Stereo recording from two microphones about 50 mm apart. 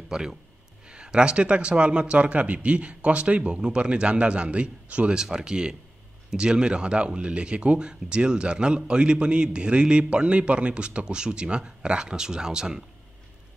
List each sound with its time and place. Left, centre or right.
0.1 s speech: centre